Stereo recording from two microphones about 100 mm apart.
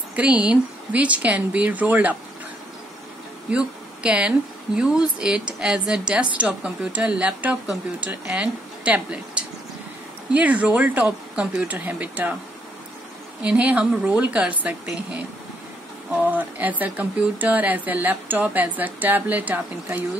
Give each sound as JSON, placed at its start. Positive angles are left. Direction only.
{"t": 0.1, "sound": "speech", "side_deg": -15}
{"t": 3.4, "sound": "speech", "side_deg": -10}
{"t": 13.4, "sound": "speech", "side_deg": -10}
{"t": 16.2, "sound": "speech", "side_deg": -15}